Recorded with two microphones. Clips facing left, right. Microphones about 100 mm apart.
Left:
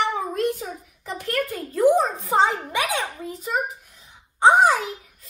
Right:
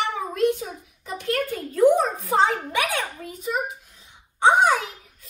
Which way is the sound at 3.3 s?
35° left (ahead or behind).